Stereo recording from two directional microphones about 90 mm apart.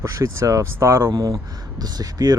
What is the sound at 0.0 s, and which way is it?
Speech, 30° right (ahead or behind).